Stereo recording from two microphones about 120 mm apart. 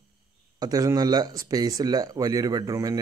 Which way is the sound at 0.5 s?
30° right (ahead or behind).